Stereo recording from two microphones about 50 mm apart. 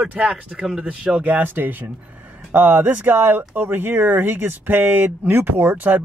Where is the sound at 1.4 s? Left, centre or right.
Right.